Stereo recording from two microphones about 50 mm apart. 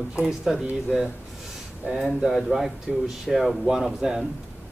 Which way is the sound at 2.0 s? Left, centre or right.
Centre.